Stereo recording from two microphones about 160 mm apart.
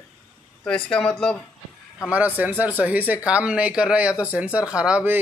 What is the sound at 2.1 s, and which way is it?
Speech, 10° right (ahead or behind).